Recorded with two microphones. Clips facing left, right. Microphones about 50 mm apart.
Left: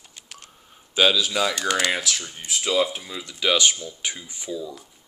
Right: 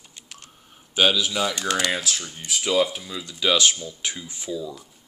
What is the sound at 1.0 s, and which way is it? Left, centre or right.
Speech, right.